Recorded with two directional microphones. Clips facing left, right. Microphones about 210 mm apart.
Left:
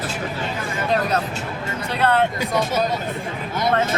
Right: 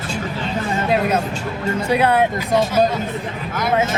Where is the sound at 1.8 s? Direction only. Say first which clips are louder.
Right 3 dB; 10° right (ahead or behind).